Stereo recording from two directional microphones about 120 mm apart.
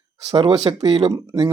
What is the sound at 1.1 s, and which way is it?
Speech, 30° right (ahead or behind).